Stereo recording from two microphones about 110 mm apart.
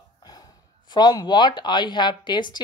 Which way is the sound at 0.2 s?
40° left (ahead or behind).